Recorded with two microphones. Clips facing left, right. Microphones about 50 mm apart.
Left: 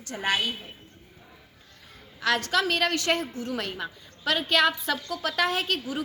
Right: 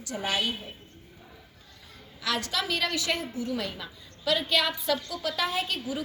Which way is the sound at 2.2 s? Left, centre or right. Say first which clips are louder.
Left 5 dB; left.